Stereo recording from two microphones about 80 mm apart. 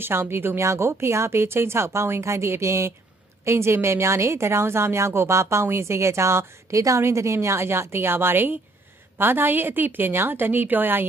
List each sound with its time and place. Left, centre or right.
0.0 s a woman's voice: right